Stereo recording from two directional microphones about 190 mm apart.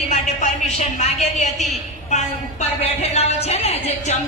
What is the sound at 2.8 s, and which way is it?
A woman's voice, 35° left (ahead or behind).